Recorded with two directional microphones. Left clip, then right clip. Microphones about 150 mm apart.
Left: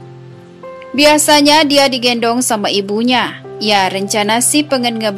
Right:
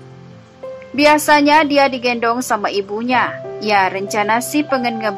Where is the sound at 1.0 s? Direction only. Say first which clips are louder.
Left 2 dB; 30° left (ahead or behind).